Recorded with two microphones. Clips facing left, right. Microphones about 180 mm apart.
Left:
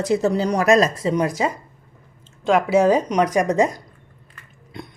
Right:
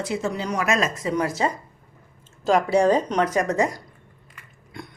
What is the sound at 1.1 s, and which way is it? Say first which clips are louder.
Speech: left 3 dB; 15° left (ahead or behind).